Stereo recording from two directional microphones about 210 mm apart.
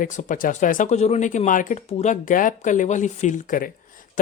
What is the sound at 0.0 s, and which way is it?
Speech, 35° left (ahead or behind).